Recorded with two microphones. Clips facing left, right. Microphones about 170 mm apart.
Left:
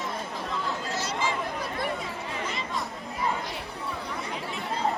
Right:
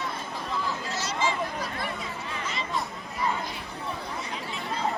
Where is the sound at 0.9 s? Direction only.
55° left (ahead or behind).